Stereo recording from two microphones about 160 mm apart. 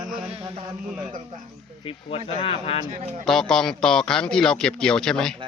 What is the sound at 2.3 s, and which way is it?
Speech, 40° left (ahead or behind).